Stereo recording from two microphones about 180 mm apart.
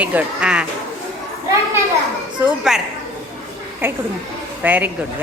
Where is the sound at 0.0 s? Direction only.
10° right (ahead or behind).